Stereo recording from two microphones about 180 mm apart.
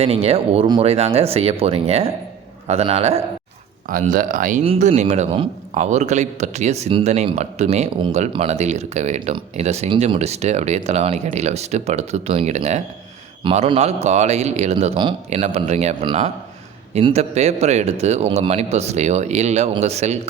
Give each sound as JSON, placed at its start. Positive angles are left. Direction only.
{"t": 0.0, "sound": "speech", "side_deg": -35}
{"t": 3.8, "sound": "speech", "side_deg": -50}
{"t": 4.6, "sound": "speech", "side_deg": -35}